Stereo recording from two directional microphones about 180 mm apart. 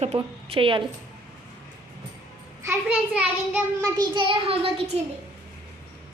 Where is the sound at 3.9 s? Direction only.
25° right (ahead or behind).